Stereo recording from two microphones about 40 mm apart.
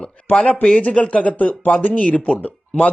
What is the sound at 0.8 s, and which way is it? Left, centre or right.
Speech, left.